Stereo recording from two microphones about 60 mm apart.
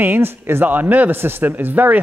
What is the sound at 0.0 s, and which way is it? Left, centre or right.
Speech, right.